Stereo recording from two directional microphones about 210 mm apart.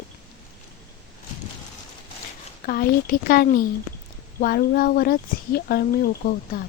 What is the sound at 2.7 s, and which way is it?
Speech, 45° left (ahead or behind).